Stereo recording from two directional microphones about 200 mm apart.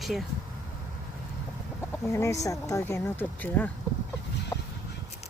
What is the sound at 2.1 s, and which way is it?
Speech, 15° left (ahead or behind).